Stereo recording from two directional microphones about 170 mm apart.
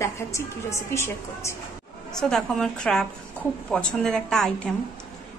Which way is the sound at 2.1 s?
5° left (ahead or behind).